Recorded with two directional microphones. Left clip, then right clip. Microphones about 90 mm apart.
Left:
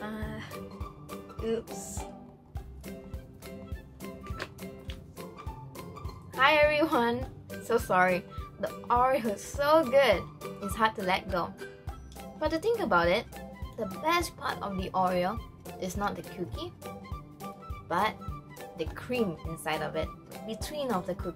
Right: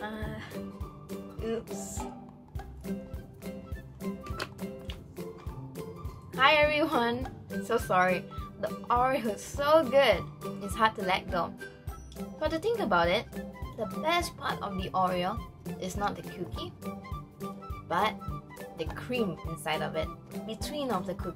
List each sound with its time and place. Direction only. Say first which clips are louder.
0.0 s music: right 1 dB; centre (ahead or behind)
1.4 s speech: left 2 dB; centre (ahead or behind)
6.3 s a woman's voice: even; centre (ahead or behind)
17.8 s speech: even; 5° left (ahead or behind)